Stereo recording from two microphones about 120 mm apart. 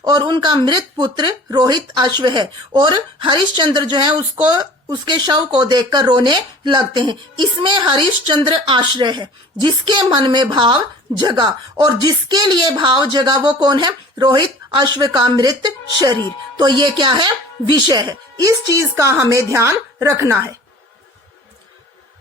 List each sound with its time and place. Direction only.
0.0 s speech: 35° right (ahead or behind)